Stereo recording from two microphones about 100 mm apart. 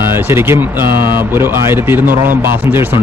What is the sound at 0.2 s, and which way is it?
Speech, 25° right (ahead or behind).